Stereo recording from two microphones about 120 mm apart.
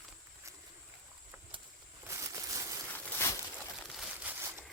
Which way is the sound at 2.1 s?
25° right (ahead or behind).